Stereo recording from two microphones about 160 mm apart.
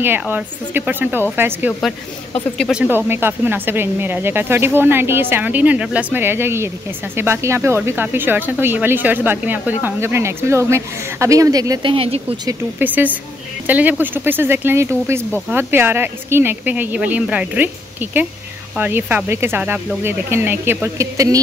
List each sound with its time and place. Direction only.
0.0 s speech: 15° right (ahead or behind)
2.5 s speech: 5° left (ahead or behind)
3.1 s speech: 15° right (ahead or behind); by 12.4 s 35° right (ahead or behind)
12.4 s speech: 10° right (ahead or behind)
18.8 s speech: 10° right (ahead or behind)